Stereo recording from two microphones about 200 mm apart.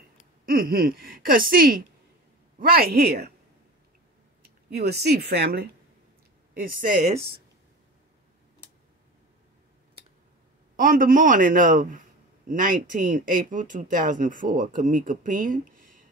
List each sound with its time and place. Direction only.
0.5 s a man's voice: 45° right (ahead or behind)
4.6 s a man's voice: 50° right (ahead or behind)
6.6 s speech: 40° right (ahead or behind)
10.8 s a man's voice: 45° right (ahead or behind)